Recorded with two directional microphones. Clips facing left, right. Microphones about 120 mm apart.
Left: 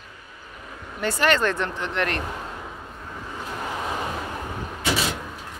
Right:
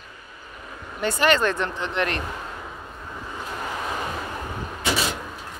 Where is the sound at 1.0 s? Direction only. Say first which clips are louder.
Right 1 dB; 20° right (ahead or behind).